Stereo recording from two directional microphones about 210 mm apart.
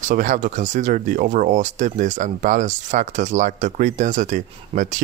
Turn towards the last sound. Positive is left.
turn(degrees=-35)  # may be behind; listen again after turning